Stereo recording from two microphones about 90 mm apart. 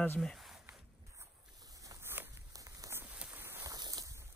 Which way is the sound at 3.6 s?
45° right (ahead or behind).